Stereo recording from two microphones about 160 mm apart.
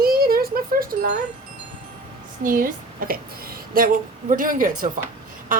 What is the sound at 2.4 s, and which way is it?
A woman's voice, 60° right (ahead or behind).